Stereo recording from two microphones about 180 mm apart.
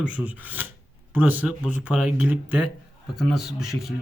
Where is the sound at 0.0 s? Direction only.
10° right (ahead or behind).